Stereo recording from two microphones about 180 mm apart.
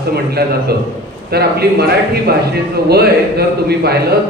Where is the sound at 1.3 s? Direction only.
60° right (ahead or behind).